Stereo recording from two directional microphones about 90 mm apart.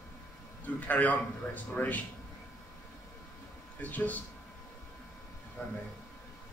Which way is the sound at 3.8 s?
20° left (ahead or behind).